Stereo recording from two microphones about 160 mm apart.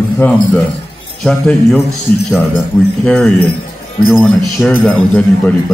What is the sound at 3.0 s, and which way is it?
Speech, 5° left (ahead or behind).